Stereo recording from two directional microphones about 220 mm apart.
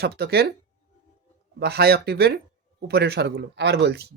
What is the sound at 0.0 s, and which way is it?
Speech, 50° right (ahead or behind).